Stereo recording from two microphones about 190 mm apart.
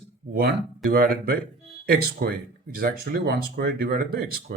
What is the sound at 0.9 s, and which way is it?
Speech, 50° right (ahead or behind).